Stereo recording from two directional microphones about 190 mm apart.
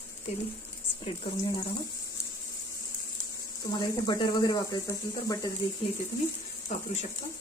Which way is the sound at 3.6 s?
20° left (ahead or behind).